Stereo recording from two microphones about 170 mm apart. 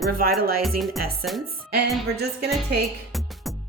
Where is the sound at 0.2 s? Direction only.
60° right (ahead or behind).